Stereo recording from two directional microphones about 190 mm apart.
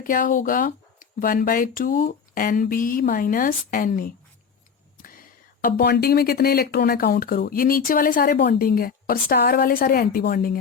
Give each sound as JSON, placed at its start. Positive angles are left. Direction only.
{"t": 0.0, "sound": "speech", "side_deg": 45}
{"t": 5.6, "sound": "speech", "side_deg": 55}